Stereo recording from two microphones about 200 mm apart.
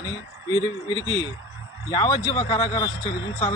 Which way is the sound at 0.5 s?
25° left (ahead or behind).